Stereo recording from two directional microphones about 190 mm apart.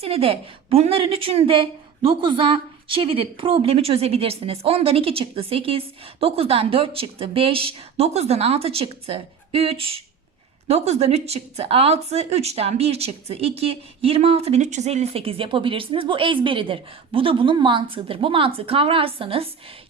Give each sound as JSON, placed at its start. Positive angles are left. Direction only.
{"t": 0.0, "sound": "a woman's voice", "side_deg": -30}